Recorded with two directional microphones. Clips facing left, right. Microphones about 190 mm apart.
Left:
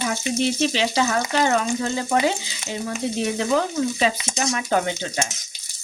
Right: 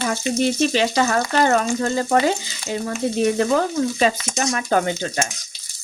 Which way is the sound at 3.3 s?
45° right (ahead or behind).